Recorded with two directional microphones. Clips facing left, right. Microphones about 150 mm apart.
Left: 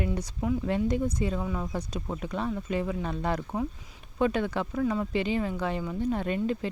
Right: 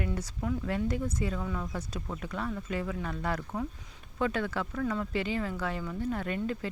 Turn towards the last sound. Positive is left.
turn(degrees=20)  # may be behind; listen again after turning